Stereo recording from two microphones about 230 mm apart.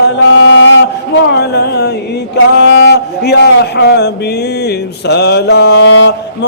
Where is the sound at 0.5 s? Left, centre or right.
Left.